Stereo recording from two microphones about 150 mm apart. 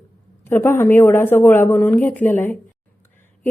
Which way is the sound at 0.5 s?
15° left (ahead or behind).